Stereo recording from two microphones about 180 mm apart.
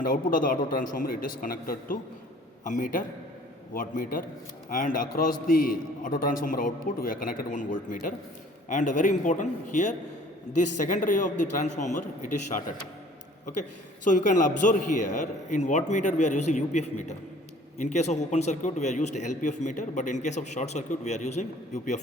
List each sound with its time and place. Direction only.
0.0 s a man's voice: 50° left (ahead or behind)